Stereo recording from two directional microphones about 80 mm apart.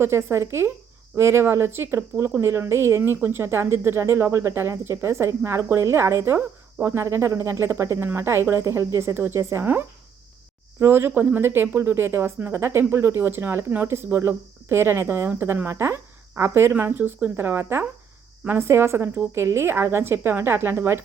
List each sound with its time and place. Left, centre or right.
0.0 s speech: right
10.8 s a woman's voice: right